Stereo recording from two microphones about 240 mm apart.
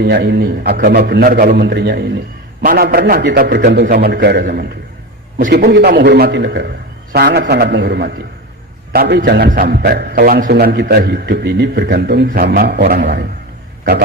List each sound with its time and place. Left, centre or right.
0.0 s a man's voice: right